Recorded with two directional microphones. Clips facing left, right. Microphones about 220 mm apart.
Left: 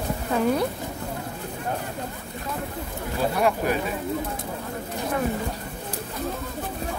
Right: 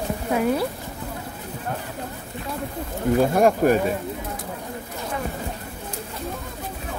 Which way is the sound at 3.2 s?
45° right (ahead or behind).